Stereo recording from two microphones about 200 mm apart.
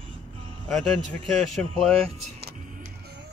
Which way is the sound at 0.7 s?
Centre (ahead or behind).